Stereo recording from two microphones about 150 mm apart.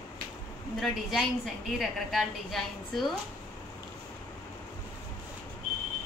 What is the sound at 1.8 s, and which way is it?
A woman's voice, centre (ahead or behind).